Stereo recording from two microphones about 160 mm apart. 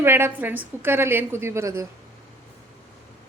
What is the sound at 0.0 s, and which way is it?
A woman's voice, 15° right (ahead or behind).